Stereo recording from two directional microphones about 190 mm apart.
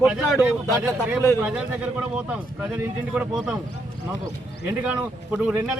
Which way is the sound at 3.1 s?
5° right (ahead or behind).